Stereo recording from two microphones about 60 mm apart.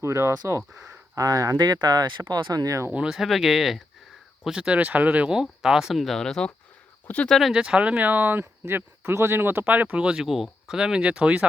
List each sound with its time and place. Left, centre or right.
0.0 s speech: right
1.1 s speech: right
3.0 s speech: centre
4.4 s speech: centre
7.5 s speech: centre
7.9 s speech: right
10.2 s speech: centre; by 11.4 s right